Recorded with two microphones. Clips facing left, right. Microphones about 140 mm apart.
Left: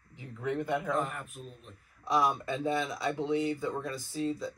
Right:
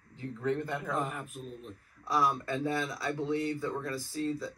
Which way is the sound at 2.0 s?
20° left (ahead or behind).